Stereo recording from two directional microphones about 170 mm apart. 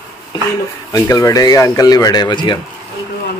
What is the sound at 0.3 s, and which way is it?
Speech, 25° left (ahead or behind).